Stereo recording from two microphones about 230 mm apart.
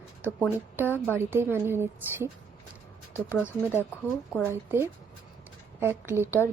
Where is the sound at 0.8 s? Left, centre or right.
Centre.